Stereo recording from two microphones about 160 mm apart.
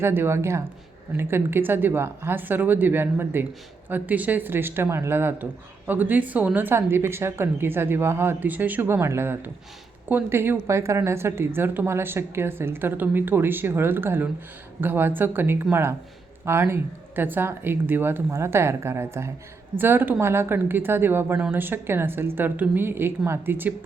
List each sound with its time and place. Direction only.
0.0 s speech: 15° right (ahead or behind)